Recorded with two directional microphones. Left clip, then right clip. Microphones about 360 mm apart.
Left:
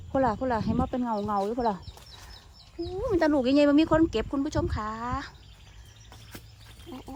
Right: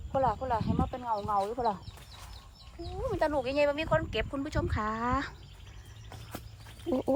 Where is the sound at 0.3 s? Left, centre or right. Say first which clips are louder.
Left 3 dB; centre.